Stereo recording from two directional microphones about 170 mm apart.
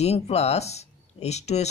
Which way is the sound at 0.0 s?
40° left (ahead or behind).